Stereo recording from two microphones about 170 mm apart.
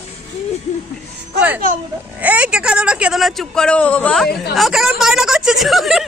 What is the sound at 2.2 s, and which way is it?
Speech, 10° right (ahead or behind).